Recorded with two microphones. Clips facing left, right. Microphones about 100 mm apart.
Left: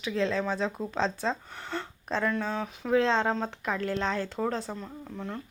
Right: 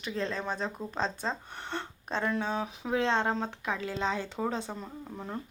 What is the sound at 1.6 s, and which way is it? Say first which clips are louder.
Speech: left 1 dB; 20° right (ahead or behind).